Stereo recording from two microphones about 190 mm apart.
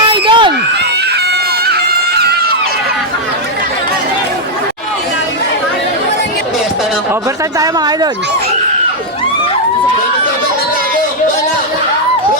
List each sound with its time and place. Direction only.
0.1 s a sound: 25° right (ahead or behind)
1.3 s run: 55° right (ahead or behind)
7.6 s speech: 20° right (ahead or behind)